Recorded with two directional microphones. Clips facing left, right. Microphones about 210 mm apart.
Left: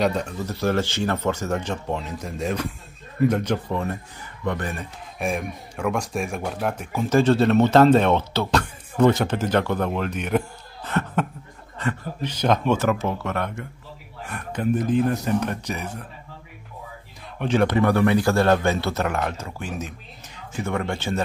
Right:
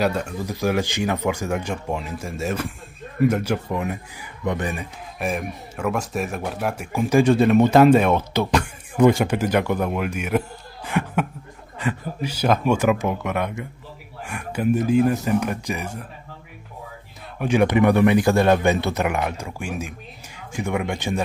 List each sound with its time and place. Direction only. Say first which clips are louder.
0.0 s speech: even; 10° right (ahead or behind)
5.2 s speech: even; 5° right (ahead or behind)
17.4 s speech: right 2 dB; 10° right (ahead or behind)